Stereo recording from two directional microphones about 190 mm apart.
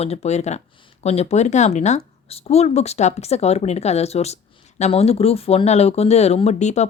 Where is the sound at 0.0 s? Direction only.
35° left (ahead or behind).